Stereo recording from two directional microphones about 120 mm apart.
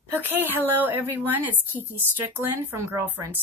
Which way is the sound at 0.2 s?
15° right (ahead or behind).